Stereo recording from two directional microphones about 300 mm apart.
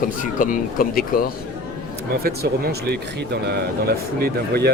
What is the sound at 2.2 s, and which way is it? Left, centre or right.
Speech, right.